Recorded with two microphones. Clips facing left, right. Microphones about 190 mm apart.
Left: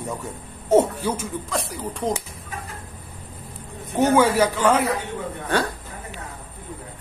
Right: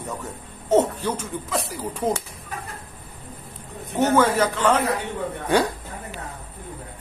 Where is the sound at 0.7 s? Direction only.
10° left (ahead or behind).